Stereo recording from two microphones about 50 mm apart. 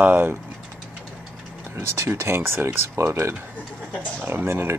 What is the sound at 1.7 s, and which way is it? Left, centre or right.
Speech, right.